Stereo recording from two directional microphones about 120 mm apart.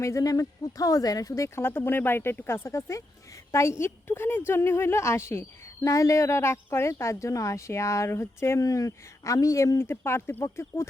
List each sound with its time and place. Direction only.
0.0 s a woman's voice: 25° left (ahead or behind)